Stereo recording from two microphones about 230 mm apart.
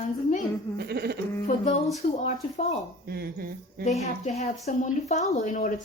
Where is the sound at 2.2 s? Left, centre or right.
Left.